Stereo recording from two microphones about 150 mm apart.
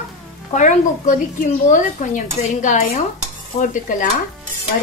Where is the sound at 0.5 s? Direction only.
55° left (ahead or behind).